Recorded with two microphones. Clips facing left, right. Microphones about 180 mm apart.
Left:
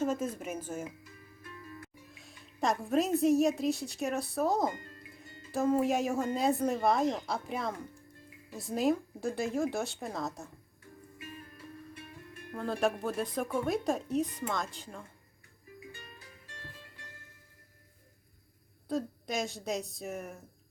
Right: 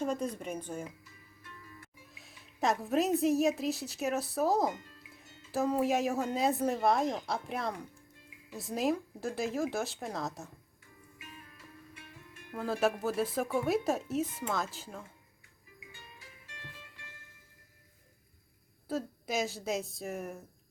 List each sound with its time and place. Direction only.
0.0 s a woman's voice: 5° left (ahead or behind)
2.1 s a woman's voice: centre (ahead or behind)
12.5 s a woman's voice: 5° right (ahead or behind)
16.0 s music: 45° left (ahead or behind)
18.9 s a woman's voice: 5° right (ahead or behind)